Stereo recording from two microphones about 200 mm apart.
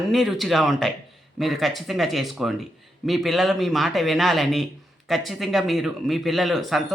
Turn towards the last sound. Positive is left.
turn(degrees=0)  # may be behind; listen again after turning